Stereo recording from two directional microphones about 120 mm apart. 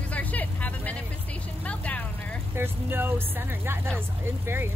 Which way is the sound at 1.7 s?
10° left (ahead or behind).